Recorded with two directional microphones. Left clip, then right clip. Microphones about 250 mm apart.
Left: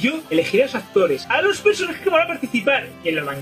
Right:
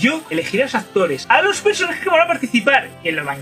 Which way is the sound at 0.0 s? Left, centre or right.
Centre.